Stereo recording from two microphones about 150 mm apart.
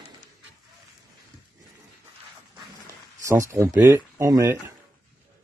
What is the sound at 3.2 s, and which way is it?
Speech, 20° right (ahead or behind).